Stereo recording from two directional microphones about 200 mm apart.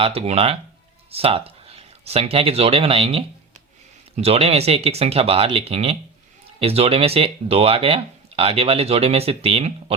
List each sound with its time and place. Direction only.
0.0 s speech: 30° right (ahead or behind)